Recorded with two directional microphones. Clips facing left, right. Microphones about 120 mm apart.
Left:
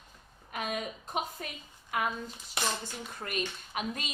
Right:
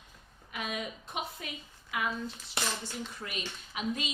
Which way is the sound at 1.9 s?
45° left (ahead or behind).